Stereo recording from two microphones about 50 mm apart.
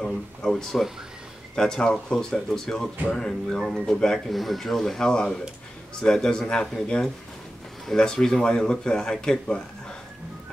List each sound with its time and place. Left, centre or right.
0.0 s a sound: centre
1.5 s speech: centre
4.3 s speech: centre
7.8 s speech: centre